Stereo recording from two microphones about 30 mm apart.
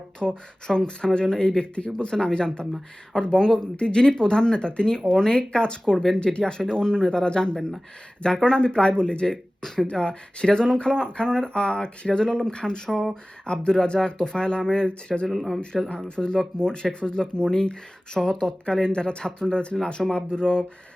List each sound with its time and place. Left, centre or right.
0.2 s speech: centre
0.9 s speech: left
6.4 s speech: left
15.4 s speech: centre
16.0 s speech: left